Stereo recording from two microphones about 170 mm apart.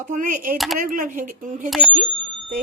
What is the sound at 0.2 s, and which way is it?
Speech, 50° right (ahead or behind).